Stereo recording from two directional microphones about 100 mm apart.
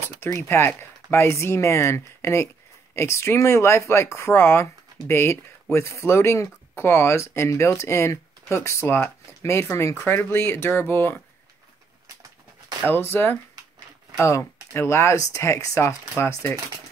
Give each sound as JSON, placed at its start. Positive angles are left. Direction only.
{"t": 0.4, "sound": "speech", "side_deg": 25}
{"t": 12.8, "sound": "speech", "side_deg": 20}